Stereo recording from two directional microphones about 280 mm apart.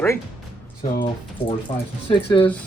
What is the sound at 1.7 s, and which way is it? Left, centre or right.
Speech, left.